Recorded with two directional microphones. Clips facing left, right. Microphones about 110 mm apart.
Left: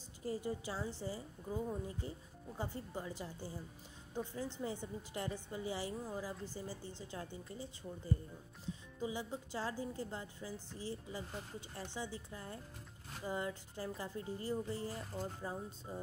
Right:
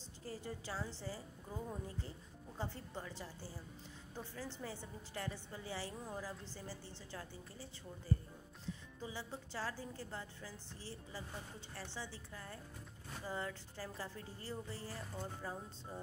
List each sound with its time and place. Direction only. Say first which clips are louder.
0.2 s speech: left 7 dB; 15° left (ahead or behind)